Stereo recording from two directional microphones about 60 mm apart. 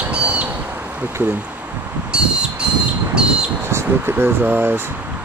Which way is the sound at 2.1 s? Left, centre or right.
Centre.